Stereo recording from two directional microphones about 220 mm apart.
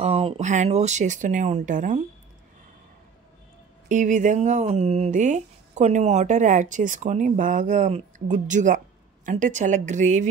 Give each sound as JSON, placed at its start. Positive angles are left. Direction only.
{"t": 0.0, "sound": "speech", "side_deg": -25}
{"t": 3.9, "sound": "speech", "side_deg": -35}